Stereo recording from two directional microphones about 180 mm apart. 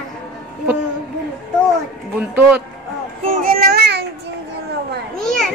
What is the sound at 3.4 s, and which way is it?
Child singing, 55° right (ahead or behind).